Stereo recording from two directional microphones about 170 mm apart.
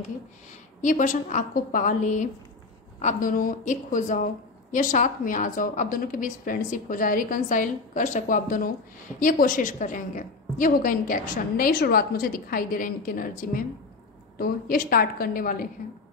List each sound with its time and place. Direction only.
0.8 s a woman's voice: 50° left (ahead or behind)